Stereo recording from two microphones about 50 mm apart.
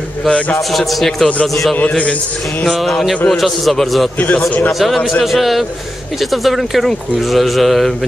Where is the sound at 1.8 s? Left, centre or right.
Left.